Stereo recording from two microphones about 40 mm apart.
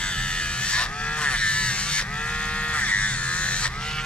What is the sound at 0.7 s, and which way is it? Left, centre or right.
Goose, left.